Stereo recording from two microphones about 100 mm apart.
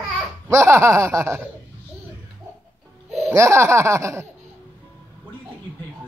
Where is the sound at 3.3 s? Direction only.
30° right (ahead or behind).